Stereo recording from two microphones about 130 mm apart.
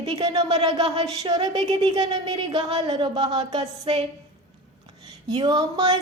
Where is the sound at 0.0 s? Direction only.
35° right (ahead or behind).